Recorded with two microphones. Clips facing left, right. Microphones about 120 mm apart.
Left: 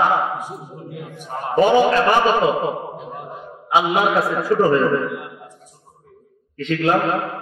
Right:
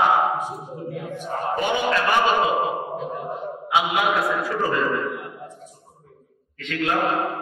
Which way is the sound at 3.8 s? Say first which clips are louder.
Left 4 dB; 35° left (ahead or behind).